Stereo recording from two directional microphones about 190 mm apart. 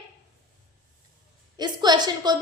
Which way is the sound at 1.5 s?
20° right (ahead or behind).